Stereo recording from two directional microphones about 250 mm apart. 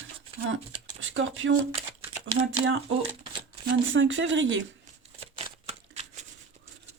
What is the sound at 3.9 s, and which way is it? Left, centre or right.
Speech, right.